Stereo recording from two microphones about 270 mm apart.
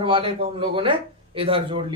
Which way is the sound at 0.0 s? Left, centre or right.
Centre.